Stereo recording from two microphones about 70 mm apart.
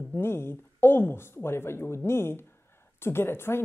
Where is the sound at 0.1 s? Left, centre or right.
Left.